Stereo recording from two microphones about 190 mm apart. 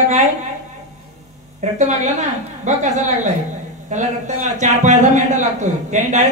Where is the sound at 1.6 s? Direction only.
40° right (ahead or behind).